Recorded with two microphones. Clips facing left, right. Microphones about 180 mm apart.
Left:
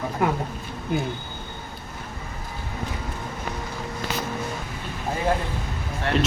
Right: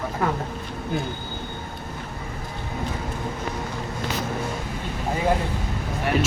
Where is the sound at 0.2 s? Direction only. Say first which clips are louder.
Left 2 dB; 15° left (ahead or behind).